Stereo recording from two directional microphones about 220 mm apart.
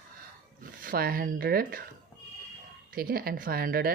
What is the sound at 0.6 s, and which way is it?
Speech, 40° right (ahead or behind).